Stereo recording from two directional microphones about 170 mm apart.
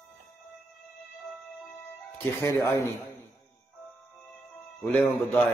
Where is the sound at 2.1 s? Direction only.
15° left (ahead or behind).